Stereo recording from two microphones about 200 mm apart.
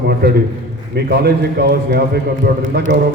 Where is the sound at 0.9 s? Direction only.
50° right (ahead or behind).